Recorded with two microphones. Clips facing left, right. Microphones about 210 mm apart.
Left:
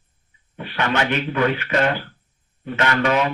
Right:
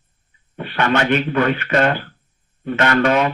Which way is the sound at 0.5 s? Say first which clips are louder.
Right 4 dB; 55° right (ahead or behind).